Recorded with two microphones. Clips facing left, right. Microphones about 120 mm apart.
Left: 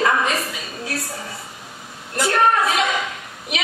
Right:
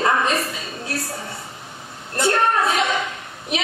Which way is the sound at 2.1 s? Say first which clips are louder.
Left 1 dB; 30° right (ahead or behind).